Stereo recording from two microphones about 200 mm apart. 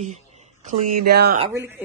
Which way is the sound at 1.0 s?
50° right (ahead or behind).